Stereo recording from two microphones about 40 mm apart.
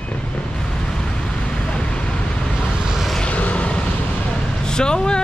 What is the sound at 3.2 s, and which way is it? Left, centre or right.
Vehicle, left.